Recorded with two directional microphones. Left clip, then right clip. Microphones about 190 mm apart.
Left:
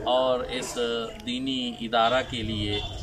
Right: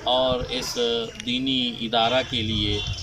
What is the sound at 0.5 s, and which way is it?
Speech, 20° left (ahead or behind).